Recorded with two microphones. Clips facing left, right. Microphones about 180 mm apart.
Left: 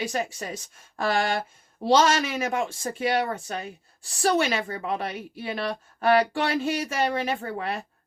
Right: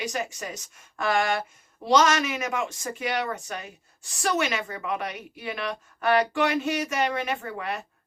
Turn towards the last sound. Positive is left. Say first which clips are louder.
# left 2 dB
turn(degrees=30)  # may be behind; listen again after turning